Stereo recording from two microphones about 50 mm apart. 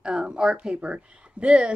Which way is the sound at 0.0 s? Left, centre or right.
Centre.